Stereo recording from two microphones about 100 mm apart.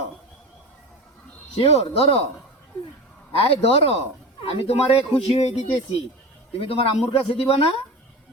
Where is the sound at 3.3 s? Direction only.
75° left (ahead or behind).